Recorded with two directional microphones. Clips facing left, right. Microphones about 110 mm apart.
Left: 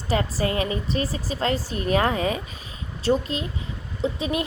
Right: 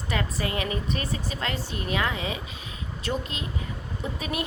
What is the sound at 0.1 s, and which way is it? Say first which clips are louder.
A woman's voice: left 5 dB; 35° left (ahead or behind).